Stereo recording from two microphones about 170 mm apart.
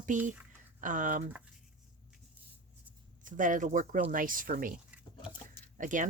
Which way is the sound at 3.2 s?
50° right (ahead or behind).